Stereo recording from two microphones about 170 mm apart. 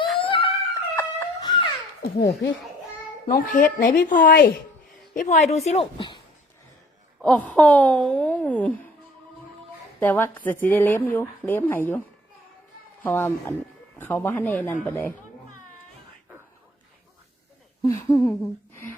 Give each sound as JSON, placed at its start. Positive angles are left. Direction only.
{"t": 0.2, "sound": "dog", "side_deg": 30}
{"t": 0.7, "sound": "dog", "side_deg": 15}
{"t": 2.0, "sound": "a child's voice", "side_deg": 65}
{"t": 3.2, "sound": "a woman's voice", "side_deg": 55}
{"t": 4.3, "sound": "a child's voice", "side_deg": 70}
{"t": 5.1, "sound": "a woman's voice", "side_deg": 50}
{"t": 7.2, "sound": "a woman's voice", "side_deg": 5}
{"t": 10.0, "sound": "a woman's voice", "side_deg": 10}
{"t": 13.0, "sound": "a woman's voice", "side_deg": 10}
{"t": 17.8, "sound": "a sound", "side_deg": 15}